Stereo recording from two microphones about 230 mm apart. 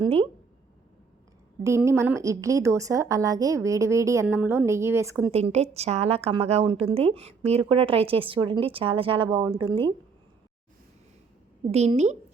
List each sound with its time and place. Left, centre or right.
0.0 s a woman's voice: right
1.6 s a woman's voice: centre
5.3 s a woman's voice: right
11.7 s a woman's voice: right